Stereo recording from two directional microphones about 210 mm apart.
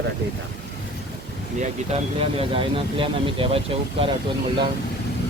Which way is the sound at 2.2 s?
25° right (ahead or behind).